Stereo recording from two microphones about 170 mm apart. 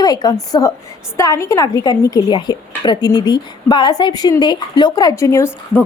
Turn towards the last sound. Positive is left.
turn(degrees=15)  # may be behind; listen again after turning